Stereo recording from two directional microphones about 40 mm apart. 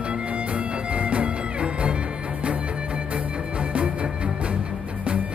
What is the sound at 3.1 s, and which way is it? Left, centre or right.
Music, right.